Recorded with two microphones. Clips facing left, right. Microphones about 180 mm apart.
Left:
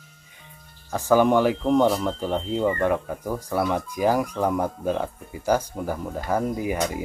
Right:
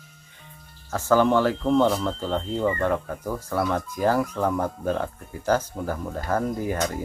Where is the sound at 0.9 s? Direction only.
15° left (ahead or behind).